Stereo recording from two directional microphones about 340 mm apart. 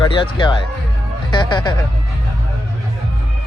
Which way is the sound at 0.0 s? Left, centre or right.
Centre.